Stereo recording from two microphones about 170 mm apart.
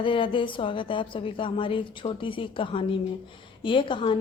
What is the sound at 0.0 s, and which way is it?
A woman's voice, 30° left (ahead or behind).